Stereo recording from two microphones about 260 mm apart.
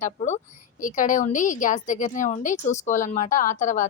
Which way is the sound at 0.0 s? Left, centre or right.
Left.